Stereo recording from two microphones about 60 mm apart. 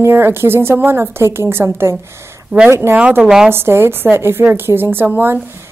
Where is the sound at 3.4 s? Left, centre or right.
Right.